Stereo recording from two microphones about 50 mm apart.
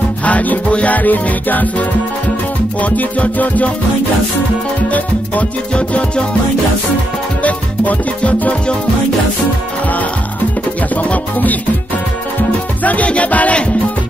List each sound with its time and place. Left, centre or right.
0.2 s music: left
4.9 s music: left
7.4 s music: left
11.0 s music: left
12.8 s music: left